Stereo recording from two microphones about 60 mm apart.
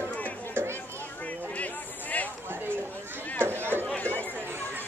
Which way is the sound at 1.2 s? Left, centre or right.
Left.